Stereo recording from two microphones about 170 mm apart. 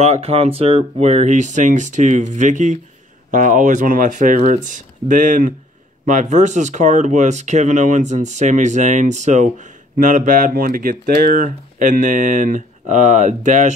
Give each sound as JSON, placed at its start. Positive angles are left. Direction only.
{"t": 0.0, "sound": "speech", "side_deg": -40}